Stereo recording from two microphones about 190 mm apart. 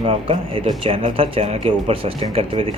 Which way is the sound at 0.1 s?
30° right (ahead or behind).